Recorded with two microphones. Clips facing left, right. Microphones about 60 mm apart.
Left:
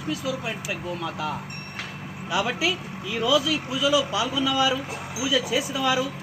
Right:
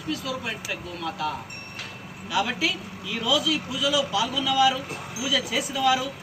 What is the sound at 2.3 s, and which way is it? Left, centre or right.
A woman's voice, left.